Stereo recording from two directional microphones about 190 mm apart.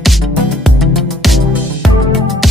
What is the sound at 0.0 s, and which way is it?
Music, centre (ahead or behind).